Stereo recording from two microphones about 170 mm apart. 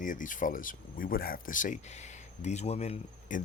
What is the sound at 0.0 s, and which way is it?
Speech, 50° left (ahead or behind).